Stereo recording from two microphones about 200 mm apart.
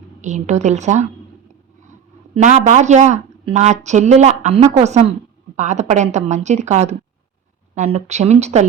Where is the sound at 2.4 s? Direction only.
35° right (ahead or behind).